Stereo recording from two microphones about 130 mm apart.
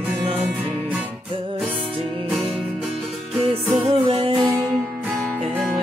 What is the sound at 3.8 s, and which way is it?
Music, 45° right (ahead or behind).